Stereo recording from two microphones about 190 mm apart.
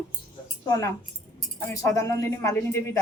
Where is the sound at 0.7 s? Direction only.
15° left (ahead or behind).